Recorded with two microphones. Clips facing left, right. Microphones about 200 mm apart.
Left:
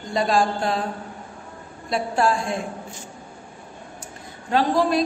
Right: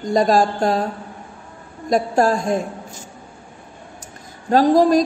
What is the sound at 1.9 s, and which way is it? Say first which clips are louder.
Speech: right 5 dB; 40° right (ahead or behind).